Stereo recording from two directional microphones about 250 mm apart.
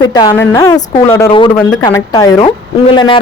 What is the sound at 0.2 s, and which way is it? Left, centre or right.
A woman's voice, centre.